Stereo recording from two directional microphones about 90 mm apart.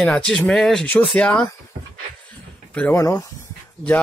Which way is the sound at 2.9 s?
30° left (ahead or behind).